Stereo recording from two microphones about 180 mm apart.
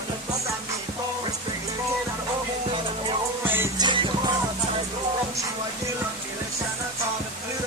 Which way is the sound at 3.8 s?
25° right (ahead or behind).